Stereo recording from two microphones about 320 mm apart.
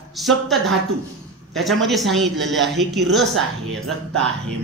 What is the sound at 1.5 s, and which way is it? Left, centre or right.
Speech, centre.